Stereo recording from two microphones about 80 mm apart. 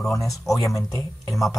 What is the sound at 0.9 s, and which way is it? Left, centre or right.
Speech, left.